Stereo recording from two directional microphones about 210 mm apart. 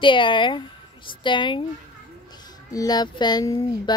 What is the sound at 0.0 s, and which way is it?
Speech, 25° left (ahead or behind).